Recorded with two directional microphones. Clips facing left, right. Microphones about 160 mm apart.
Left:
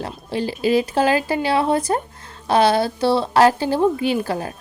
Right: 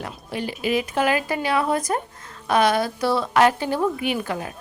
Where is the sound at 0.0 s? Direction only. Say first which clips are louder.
Left 5 dB; 30° left (ahead or behind).